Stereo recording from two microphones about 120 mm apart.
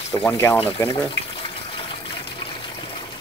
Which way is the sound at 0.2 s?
20° left (ahead or behind).